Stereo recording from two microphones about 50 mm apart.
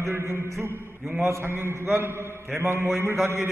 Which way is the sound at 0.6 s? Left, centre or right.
Right.